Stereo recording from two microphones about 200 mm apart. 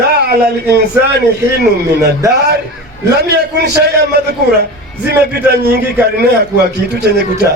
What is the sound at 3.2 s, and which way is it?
Speech, 55° right (ahead or behind).